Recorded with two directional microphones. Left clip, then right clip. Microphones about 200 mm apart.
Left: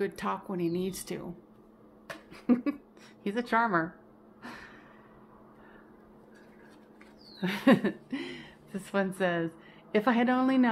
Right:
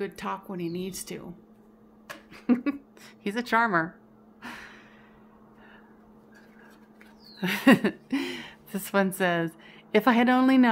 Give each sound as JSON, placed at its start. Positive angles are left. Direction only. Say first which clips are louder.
{"t": 0.0, "sound": "speech", "louder": "even", "side_deg": 5}
{"t": 2.0, "sound": "a sound", "louder": "right 2 dB", "side_deg": -10}
{"t": 3.3, "sound": "a woman's voice", "louder": "right 3 dB", "side_deg": -15}
{"t": 4.4, "sound": "a sound", "louder": "right 4 dB", "side_deg": -10}
{"t": 7.3, "sound": "a woman's voice", "louder": "right 4 dB", "side_deg": -15}
{"t": 8.1, "sound": "a woman's voice", "louder": "right 7 dB", "side_deg": -35}